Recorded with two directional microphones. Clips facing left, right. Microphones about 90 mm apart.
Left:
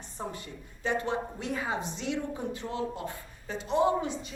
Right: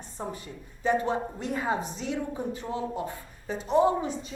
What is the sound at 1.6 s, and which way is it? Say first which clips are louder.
Speech: right 7 dB; 40° right (ahead or behind).